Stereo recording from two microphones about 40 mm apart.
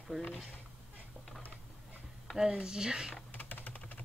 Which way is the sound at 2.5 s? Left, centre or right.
Centre.